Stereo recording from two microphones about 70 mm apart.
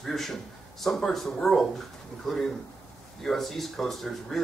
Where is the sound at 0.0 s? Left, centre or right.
Centre.